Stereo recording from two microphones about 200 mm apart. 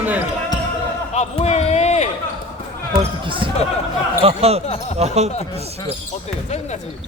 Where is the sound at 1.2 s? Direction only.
35° left (ahead or behind).